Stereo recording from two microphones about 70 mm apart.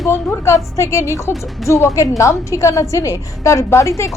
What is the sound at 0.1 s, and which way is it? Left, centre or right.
A woman's voice, left.